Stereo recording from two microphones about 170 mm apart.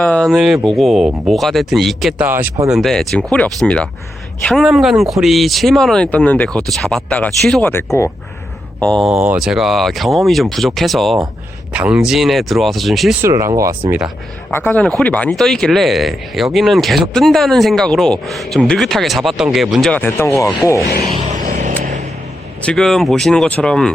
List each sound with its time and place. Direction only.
0.0 s speech: 5° left (ahead or behind)
7.9 s speech: 15° left (ahead or behind)
8.8 s speech: 5° left (ahead or behind)
13.2 s speech: 15° right (ahead or behind)
14.5 s speech: 10° left (ahead or behind)
20.0 s speech: 15° left (ahead or behind)
21.1 s vehicle: 45° right (ahead or behind)
22.6 s speech: 5° left (ahead or behind)